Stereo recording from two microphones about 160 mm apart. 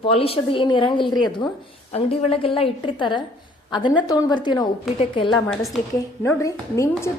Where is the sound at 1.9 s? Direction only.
35° left (ahead or behind).